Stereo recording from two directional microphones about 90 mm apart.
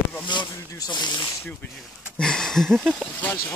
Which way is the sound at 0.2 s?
60° left (ahead or behind).